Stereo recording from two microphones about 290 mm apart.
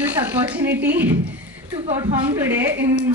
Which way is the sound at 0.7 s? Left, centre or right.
Right.